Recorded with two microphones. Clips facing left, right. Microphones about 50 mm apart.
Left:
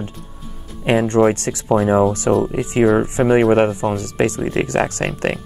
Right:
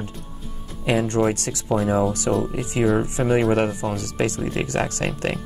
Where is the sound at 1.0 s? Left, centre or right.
Left.